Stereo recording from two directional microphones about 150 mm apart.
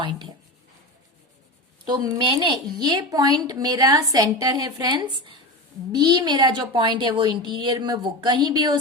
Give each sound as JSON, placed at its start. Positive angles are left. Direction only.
{"t": 0.0, "sound": "speech", "side_deg": -35}
{"t": 1.8, "sound": "a woman's voice", "side_deg": -30}